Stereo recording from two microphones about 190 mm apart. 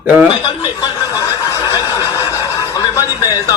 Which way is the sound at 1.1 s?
15° left (ahead or behind).